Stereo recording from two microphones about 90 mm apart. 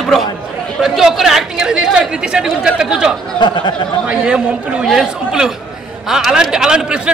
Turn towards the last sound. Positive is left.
turn(degrees=-10)  # may be behind; listen again after turning